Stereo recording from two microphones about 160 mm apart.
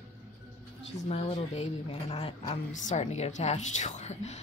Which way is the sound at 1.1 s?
40° left (ahead or behind).